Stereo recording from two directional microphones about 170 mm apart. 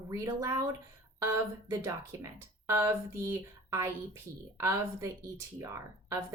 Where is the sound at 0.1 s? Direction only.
20° right (ahead or behind).